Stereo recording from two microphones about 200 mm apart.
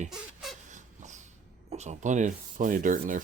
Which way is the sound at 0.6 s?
35° right (ahead or behind).